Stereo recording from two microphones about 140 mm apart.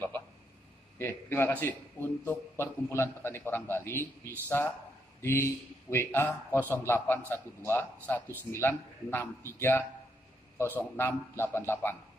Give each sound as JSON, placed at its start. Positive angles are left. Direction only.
{"t": 0.9, "sound": "a man's voice", "side_deg": 15}